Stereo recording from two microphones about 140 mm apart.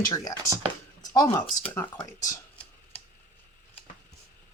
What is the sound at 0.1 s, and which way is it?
Speech, 25° left (ahead or behind).